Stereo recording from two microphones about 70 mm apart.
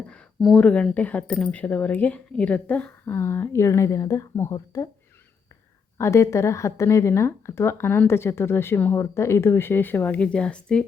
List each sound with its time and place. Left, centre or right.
0.5 s speech: centre
3.1 s speech: left
6.0 s speech: left
10.2 s speech: centre